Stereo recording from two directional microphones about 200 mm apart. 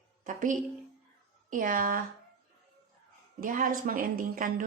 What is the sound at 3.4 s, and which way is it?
A woman's voice, 45° right (ahead or behind).